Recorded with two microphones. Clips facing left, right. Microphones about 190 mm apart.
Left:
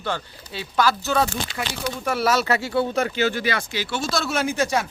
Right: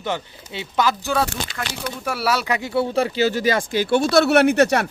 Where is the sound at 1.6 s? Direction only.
15° left (ahead or behind).